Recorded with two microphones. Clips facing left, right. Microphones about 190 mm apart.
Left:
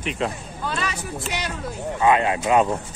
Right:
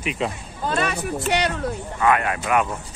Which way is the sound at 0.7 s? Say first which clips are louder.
Right 6 dB; 55° right (ahead or behind).